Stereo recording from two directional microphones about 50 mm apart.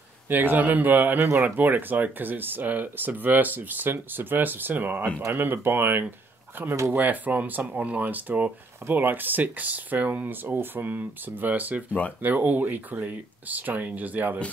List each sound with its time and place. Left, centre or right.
0.3 s speech: right
10.2 s speech: right